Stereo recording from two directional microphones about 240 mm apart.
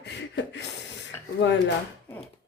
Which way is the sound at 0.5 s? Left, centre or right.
Left.